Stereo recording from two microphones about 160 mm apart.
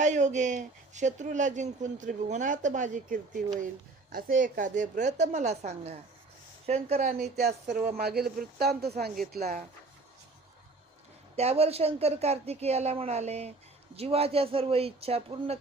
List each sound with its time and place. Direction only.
0.0 s a woman's voice: 50° right (ahead or behind)
7.3 s speech: 85° right
11.3 s a woman's voice: 40° right (ahead or behind)